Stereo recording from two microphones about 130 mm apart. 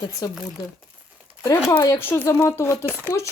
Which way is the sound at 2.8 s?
15° right (ahead or behind).